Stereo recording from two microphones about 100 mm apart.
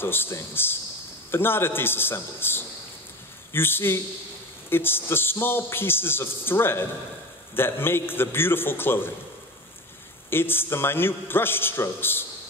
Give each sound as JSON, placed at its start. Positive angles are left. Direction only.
{"t": 0.0, "sound": "a man's voice", "side_deg": 20}
{"t": 10.3, "sound": "a man's voice", "side_deg": 20}